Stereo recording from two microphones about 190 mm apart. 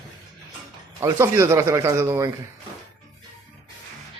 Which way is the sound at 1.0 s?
15° right (ahead or behind).